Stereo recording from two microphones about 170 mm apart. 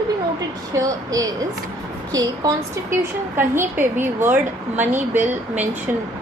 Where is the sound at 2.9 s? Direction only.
15° right (ahead or behind).